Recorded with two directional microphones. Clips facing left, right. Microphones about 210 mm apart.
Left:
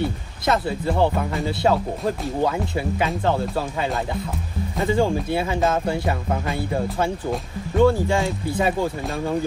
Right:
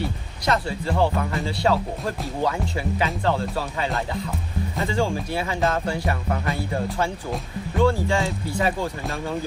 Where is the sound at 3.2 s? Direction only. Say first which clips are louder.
Left 2 dB; 15° left (ahead or behind).